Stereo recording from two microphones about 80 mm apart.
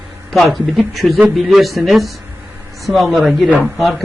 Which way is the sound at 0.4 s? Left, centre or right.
Centre.